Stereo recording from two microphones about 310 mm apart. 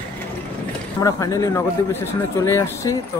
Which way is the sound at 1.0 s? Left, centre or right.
Centre.